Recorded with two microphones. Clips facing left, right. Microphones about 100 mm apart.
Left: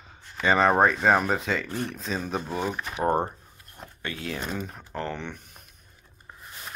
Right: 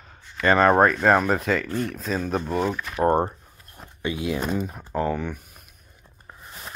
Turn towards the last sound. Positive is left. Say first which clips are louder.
# right 7 dB
turn(degrees=-5)  # may be behind; listen again after turning